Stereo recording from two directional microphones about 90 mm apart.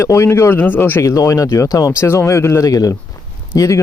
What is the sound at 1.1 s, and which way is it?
Speech, 40° left (ahead or behind).